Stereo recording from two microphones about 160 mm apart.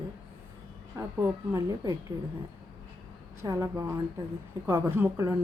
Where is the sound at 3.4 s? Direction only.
20° right (ahead or behind).